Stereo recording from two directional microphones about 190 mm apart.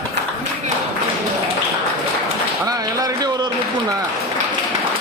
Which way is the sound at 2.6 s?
20° right (ahead or behind).